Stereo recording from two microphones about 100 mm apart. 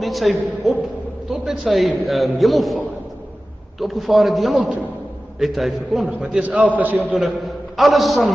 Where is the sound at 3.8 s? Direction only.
Centre (ahead or behind).